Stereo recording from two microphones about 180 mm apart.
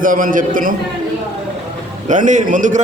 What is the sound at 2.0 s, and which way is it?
Speech, 45° right (ahead or behind).